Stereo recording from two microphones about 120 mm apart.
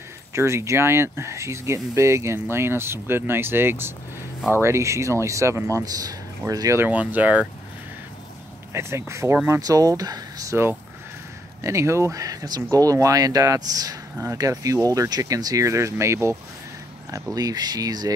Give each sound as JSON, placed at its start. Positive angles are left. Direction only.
{"t": 0.3, "sound": "speech", "side_deg": -20}
{"t": 6.8, "sound": "speech", "side_deg": -15}
{"t": 8.7, "sound": "speech", "side_deg": -20}